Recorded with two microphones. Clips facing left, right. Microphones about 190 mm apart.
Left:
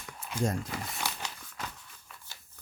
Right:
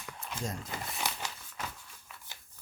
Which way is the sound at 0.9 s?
Centre (ahead or behind).